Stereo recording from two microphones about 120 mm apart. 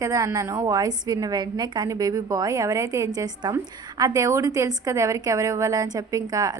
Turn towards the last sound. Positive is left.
turn(degrees=-30)  # may be behind; listen again after turning